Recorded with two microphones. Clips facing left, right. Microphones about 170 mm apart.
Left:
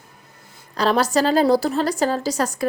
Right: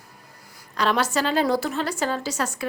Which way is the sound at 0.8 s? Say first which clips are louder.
Left 4 dB; 35° left (ahead or behind).